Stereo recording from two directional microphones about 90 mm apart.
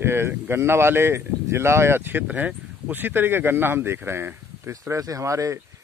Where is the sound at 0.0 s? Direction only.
25° right (ahead or behind).